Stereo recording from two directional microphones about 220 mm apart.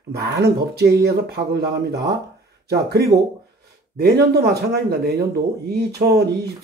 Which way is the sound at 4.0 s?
45° right (ahead or behind).